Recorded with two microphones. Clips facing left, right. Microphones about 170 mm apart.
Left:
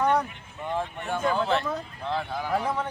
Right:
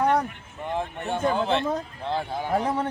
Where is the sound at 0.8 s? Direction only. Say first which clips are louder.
Right 2 dB; 25° right (ahead or behind).